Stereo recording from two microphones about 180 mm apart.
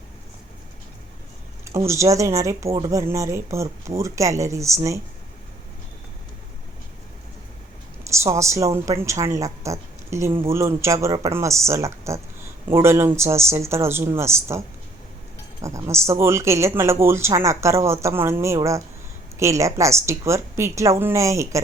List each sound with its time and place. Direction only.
1.6 s speech: 15° right (ahead or behind)
2.6 s speech: 30° right (ahead or behind)
2.9 s speech: 15° right (ahead or behind)
8.1 s a woman's voice: 15° right (ahead or behind)
15.6 s speech: 15° right (ahead or behind)